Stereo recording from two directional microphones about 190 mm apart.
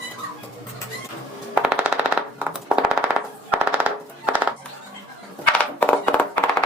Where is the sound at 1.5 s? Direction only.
5° right (ahead or behind).